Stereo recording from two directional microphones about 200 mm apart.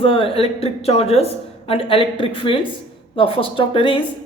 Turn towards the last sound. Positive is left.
turn(degrees=25)  # may be behind; listen again after turning